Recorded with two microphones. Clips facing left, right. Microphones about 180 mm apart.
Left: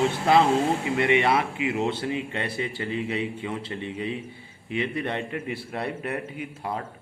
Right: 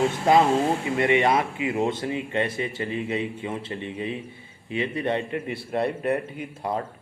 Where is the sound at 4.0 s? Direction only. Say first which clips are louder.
Even; 20° right (ahead or behind).